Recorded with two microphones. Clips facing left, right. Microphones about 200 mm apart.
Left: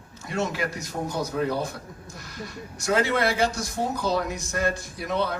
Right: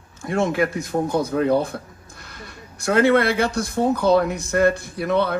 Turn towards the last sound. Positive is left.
turn(degrees=-60)  # may be behind; listen again after turning